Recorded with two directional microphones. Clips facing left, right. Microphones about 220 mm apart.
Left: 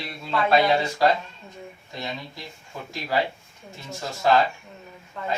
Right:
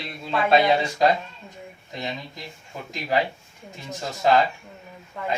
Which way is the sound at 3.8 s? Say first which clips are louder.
Right 1 dB; 20° right (ahead or behind).